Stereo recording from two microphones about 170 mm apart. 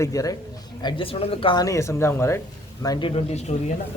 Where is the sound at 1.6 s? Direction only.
15° left (ahead or behind).